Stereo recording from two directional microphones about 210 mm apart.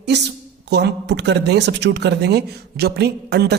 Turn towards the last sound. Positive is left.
turn(degrees=-50)  # may be behind; listen again after turning